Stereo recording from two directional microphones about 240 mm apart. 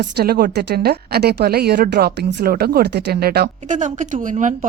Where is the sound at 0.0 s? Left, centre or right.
Right.